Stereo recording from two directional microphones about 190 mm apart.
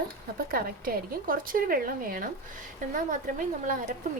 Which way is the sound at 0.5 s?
50° right (ahead or behind).